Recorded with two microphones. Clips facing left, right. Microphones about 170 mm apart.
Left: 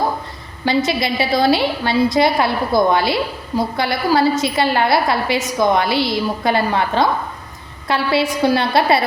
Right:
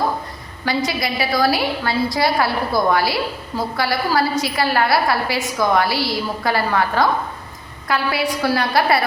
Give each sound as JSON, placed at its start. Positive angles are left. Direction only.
{"t": 0.6, "sound": "a woman's voice", "side_deg": 25}